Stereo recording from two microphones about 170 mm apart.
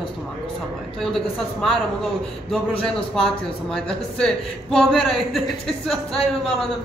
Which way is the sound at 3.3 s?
5° left (ahead or behind).